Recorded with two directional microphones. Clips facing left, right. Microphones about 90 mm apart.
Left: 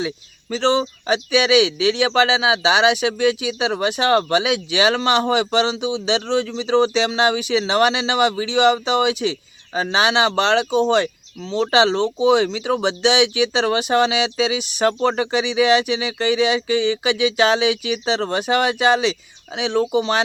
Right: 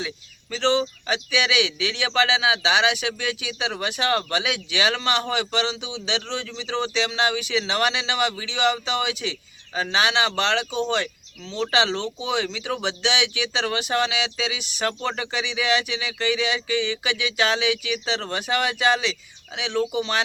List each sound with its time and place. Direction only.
0.5 s speech: 20° left (ahead or behind)